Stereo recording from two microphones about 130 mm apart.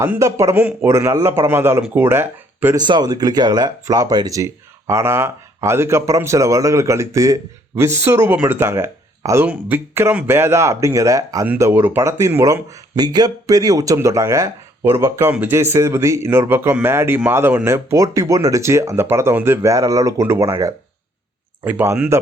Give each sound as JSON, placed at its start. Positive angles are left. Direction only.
{"t": 0.2, "sound": "speech", "side_deg": -25}
{"t": 2.7, "sound": "speech", "side_deg": -35}